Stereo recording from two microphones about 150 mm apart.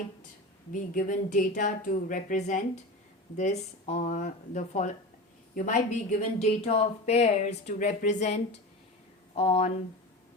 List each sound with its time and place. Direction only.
0.7 s speech: 60° left (ahead or behind)
6.6 s speech: 40° left (ahead or behind)